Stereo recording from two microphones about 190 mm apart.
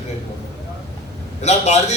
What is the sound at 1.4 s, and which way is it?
Speech, 35° left (ahead or behind).